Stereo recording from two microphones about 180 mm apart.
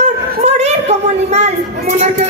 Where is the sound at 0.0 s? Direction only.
35° right (ahead or behind).